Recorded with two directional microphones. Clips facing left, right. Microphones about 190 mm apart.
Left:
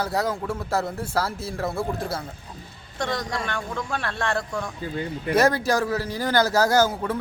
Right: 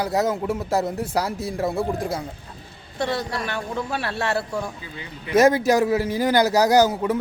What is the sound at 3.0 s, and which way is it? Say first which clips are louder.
A man's voice: right 2 dB; 5° right (ahead or behind).